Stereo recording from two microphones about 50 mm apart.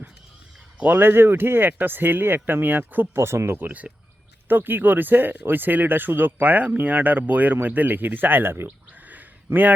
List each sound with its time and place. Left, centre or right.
0.9 s speech: right
3.2 s speech: right
3.6 s speech: right
4.4 s speech: right
8.9 s a sound: right